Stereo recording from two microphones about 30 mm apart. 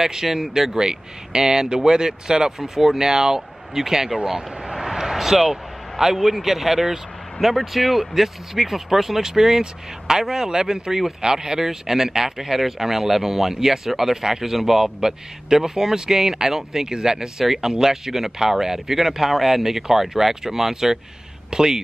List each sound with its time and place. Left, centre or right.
0.0 s speech: centre
4.2 s speech: right
4.7 s a sound: centre
6.1 s speech: centre
7.3 s speech: centre
21.5 s speech: right